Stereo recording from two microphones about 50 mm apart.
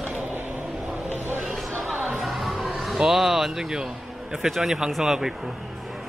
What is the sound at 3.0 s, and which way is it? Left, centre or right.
Speech, centre.